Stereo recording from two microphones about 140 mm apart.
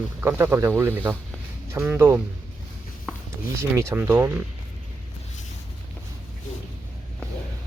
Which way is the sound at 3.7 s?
20° right (ahead or behind).